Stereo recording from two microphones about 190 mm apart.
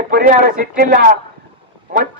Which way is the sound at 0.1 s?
50° right (ahead or behind).